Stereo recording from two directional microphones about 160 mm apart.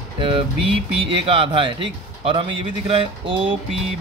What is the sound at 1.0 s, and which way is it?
Speech, 35° right (ahead or behind).